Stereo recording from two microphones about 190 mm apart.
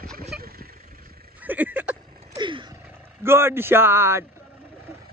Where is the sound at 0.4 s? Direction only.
50° right (ahead or behind).